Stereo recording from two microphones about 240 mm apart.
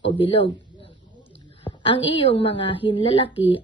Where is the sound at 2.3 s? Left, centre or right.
Left.